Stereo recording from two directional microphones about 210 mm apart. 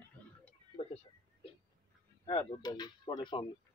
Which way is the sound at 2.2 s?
20° left (ahead or behind).